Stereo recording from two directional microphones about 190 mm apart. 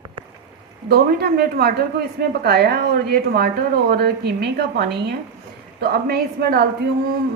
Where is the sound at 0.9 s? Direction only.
55° right (ahead or behind).